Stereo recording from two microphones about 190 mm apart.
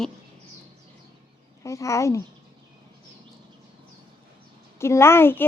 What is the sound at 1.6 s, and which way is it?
Speech, 15° left (ahead or behind).